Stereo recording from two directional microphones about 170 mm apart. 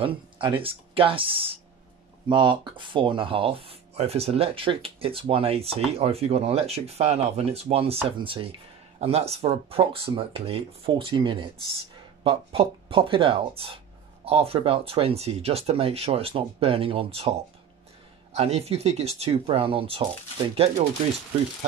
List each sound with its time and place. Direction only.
0.6 s speech: 30° right (ahead or behind)